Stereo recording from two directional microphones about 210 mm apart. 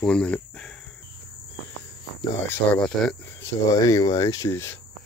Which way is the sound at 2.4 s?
5° left (ahead or behind).